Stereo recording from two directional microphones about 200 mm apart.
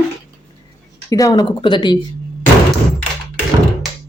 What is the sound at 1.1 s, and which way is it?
Speech, 20° left (ahead or behind).